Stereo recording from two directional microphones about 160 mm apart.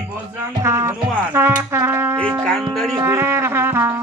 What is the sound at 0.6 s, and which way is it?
Music, 20° right (ahead or behind).